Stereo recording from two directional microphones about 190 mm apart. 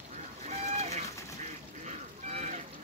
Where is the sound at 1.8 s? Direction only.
35° right (ahead or behind).